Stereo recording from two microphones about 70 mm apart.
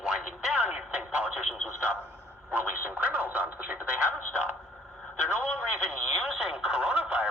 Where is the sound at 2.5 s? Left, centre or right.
Right.